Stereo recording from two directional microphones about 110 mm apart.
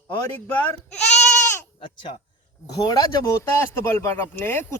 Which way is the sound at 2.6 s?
35° left (ahead or behind).